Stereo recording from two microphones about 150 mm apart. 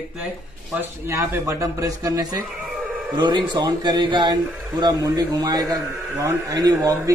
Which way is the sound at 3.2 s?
30° right (ahead or behind).